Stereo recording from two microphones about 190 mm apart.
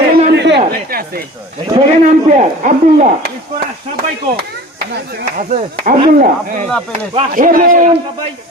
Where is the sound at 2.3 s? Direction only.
35° right (ahead or behind).